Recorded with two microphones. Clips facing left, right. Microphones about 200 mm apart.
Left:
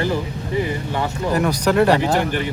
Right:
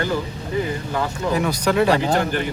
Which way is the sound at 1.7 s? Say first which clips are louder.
Left 1 dB; 5° left (ahead or behind).